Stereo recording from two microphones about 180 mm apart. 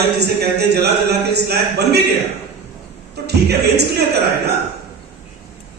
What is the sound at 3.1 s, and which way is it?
Speech, 65° right (ahead or behind).